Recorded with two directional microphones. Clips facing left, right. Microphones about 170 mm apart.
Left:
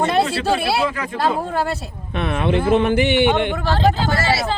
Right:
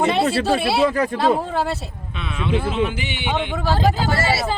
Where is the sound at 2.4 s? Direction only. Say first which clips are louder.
Left 4 dB; 55° left (ahead or behind).